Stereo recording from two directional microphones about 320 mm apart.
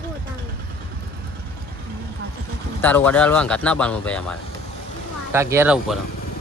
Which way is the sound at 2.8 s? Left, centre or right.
Centre.